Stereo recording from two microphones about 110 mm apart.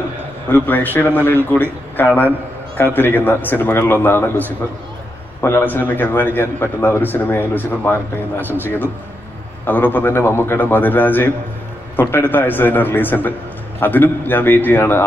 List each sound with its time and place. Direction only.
0.5 s a man's voice: 15° left (ahead or behind)
8.5 s a man's voice: 20° right (ahead or behind)
9.7 s a man's voice: 15° left (ahead or behind)